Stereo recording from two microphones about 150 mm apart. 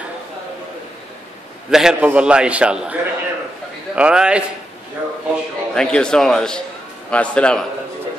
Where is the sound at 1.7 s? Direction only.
5° right (ahead or behind).